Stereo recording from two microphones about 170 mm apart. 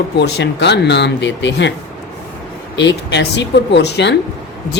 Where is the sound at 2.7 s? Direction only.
90° left.